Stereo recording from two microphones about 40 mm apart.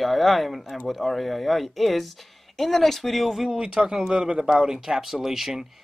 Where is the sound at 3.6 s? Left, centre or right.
Centre.